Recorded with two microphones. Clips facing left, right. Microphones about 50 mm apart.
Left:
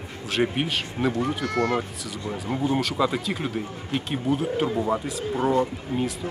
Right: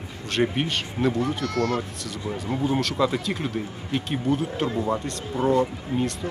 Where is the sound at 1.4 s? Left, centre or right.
Centre.